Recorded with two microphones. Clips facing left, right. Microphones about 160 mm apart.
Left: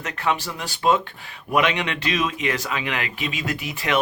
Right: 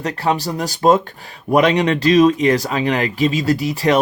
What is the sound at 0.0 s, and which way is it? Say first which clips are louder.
Speech: right 6 dB; 35° right (ahead or behind).